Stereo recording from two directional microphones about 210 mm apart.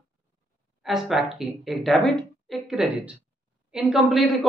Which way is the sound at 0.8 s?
Centre (ahead or behind).